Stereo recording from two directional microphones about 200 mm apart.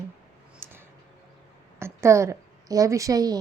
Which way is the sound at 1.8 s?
15° right (ahead or behind).